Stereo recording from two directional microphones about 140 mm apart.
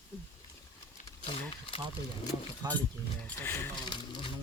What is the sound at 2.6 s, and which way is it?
Speech, 30° right (ahead or behind).